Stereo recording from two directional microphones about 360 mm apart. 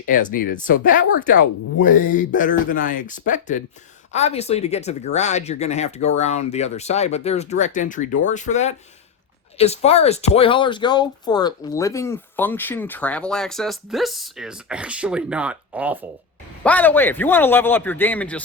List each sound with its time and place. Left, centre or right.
0.1 s speech: left; by 18.4 s centre